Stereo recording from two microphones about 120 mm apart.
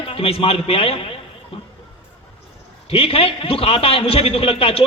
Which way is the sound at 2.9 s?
55° left (ahead or behind).